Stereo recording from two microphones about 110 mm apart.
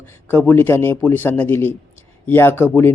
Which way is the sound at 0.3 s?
20° left (ahead or behind).